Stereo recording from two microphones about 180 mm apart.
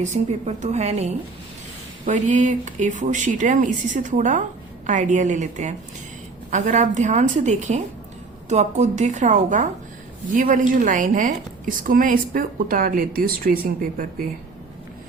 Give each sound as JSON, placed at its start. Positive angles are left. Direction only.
{"t": 0.0, "sound": "a woman's voice", "side_deg": -40}